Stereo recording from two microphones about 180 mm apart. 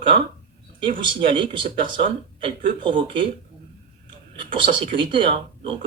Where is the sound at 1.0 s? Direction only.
30° right (ahead or behind).